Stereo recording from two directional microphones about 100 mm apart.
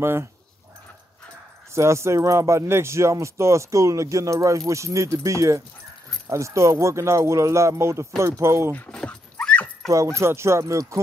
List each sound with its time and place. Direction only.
0.0 s speech: 25° right (ahead or behind)
1.7 s speech: 30° right (ahead or behind)
8.7 s dog: 15° left (ahead or behind)
9.8 s speech: 30° right (ahead or behind)